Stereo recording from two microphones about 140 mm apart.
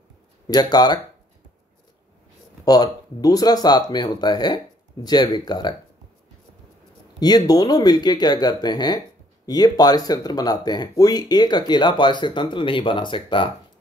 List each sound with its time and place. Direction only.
0.5 s speech: 30° left (ahead or behind)
2.6 s speech: 30° left (ahead or behind)
7.2 s speech: 30° left (ahead or behind)